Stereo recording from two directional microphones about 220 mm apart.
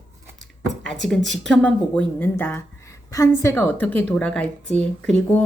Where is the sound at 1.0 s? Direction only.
Centre (ahead or behind).